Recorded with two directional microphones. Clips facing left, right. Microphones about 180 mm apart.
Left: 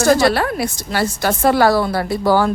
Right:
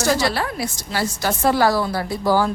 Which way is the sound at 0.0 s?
55° left (ahead or behind).